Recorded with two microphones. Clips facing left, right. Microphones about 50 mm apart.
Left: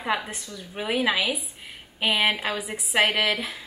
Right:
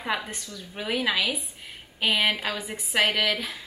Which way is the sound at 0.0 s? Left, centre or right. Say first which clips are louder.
Left 2 dB; centre.